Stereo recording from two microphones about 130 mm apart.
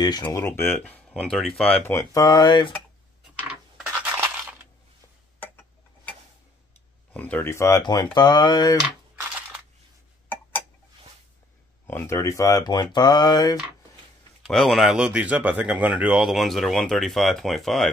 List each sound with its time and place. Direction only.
0.0 s speech: 30° left (ahead or behind)
0.4 s speech: 15° left (ahead or behind)
1.0 s speech: 5° left (ahead or behind)
1.9 s speech: 25° left (ahead or behind)
3.3 s a sound: 10° right (ahead or behind)
5.4 s tick-tock: 15° left (ahead or behind)
7.1 s speech: 10° left (ahead or behind)
7.8 s speech: 35° left (ahead or behind)
8.7 s a sound: 10° right (ahead or behind)
11.9 s speech: 20° left (ahead or behind)
14.5 s speech: centre (ahead or behind)